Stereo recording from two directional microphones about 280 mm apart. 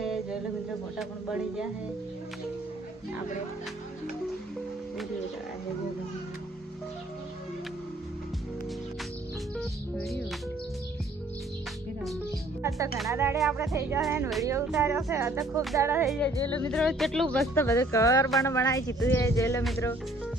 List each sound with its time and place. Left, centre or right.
0.0 s a sound: centre
0.9 s speech: centre
9.6 s speech: centre
13.1 s speech: centre
16.2 s speech: centre